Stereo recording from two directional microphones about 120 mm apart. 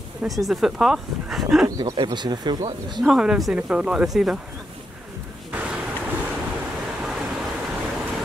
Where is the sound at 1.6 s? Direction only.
35° right (ahead or behind).